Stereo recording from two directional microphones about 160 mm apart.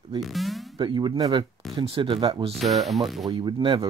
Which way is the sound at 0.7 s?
30° right (ahead or behind).